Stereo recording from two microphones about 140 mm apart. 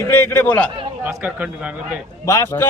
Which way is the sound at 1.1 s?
10° right (ahead or behind).